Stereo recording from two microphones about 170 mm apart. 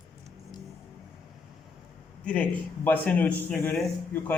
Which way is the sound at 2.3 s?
10° left (ahead or behind).